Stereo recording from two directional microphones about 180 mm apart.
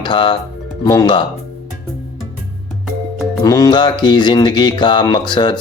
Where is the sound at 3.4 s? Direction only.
20° left (ahead or behind).